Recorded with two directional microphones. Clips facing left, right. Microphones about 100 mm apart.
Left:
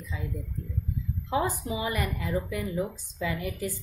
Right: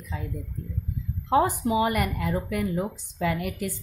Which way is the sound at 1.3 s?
60° right (ahead or behind).